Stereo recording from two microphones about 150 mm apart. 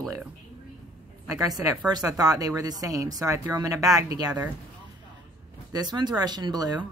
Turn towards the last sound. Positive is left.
turn(degrees=-25)  # may be behind; listen again after turning